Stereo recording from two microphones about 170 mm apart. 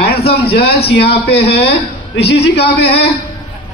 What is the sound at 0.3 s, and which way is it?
Speech, 70° left (ahead or behind).